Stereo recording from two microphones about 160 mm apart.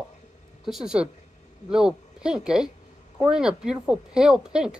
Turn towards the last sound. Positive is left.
turn(degrees=-5)  # may be behind; listen again after turning